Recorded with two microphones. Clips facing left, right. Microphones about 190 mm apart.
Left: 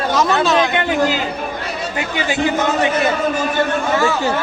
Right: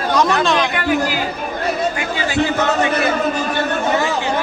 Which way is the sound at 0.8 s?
20° left (ahead or behind).